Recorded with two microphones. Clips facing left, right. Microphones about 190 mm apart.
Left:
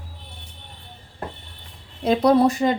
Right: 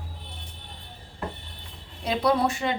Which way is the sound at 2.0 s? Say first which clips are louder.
Left 7 dB; 45° left (ahead or behind).